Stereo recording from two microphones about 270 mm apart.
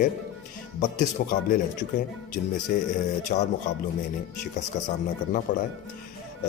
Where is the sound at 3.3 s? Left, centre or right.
Left.